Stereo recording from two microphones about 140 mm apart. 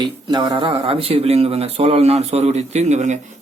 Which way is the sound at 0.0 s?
30° right (ahead or behind).